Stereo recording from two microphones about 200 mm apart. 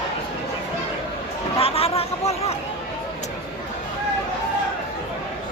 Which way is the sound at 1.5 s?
30° left (ahead or behind).